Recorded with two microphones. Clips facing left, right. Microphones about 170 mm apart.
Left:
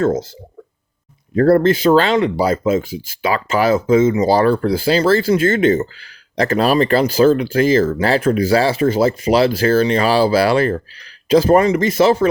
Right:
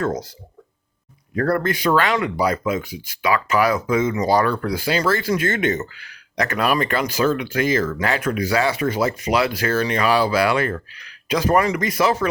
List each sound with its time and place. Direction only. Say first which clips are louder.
0.0 s speech: left 7 dB; 25° left (ahead or behind)
1.4 s speech: left 8 dB; 25° left (ahead or behind)